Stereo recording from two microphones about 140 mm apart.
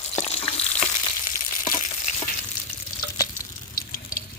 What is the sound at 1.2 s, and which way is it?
Frying, 70° left (ahead or behind).